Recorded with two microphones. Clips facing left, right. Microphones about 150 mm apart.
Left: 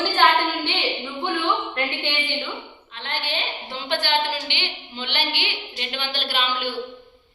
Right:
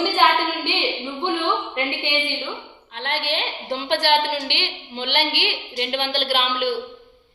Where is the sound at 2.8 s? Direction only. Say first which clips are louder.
Right 5 dB; 75° right (ahead or behind).